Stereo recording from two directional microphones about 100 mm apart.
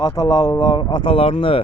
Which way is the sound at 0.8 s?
55° left (ahead or behind).